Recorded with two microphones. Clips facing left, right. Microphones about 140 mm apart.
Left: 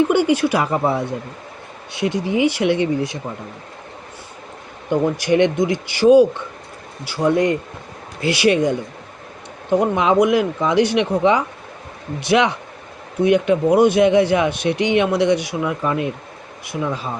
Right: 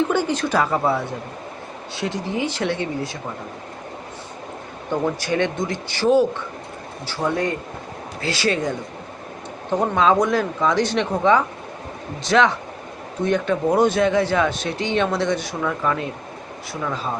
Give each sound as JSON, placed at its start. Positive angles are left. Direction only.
{"t": 0.1, "sound": "speech", "side_deg": 15}
{"t": 5.2, "sound": "speech", "side_deg": 15}
{"t": 9.7, "sound": "speech", "side_deg": 15}